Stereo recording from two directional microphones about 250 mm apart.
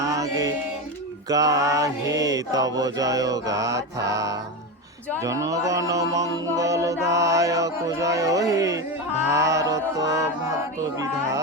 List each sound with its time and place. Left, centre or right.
0.0 s music: centre